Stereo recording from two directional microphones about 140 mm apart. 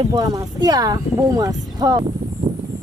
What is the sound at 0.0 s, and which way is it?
Speech, 30° right (ahead or behind).